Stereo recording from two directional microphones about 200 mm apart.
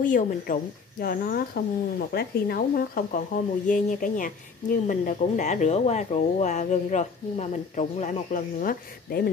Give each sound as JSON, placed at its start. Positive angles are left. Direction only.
{"t": 0.0, "sound": "speech", "side_deg": 45}